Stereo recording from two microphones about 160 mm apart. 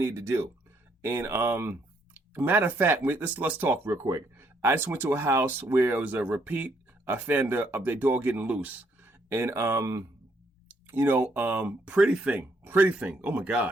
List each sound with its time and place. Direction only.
0.0 s speech: 15° right (ahead or behind)